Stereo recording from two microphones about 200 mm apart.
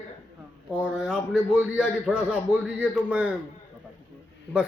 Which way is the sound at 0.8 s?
5° right (ahead or behind).